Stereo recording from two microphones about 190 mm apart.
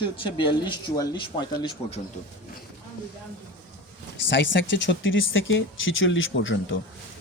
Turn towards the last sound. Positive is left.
turn(degrees=80)